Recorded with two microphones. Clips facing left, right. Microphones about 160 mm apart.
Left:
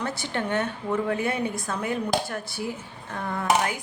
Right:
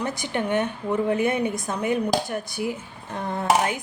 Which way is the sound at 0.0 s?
15° right (ahead or behind).